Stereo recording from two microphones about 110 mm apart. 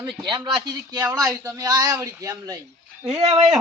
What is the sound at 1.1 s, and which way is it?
Speech, 25° right (ahead or behind).